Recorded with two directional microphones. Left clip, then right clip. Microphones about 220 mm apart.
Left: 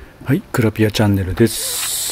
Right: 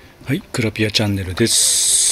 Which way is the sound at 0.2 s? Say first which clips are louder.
Left 3 dB; centre (ahead or behind).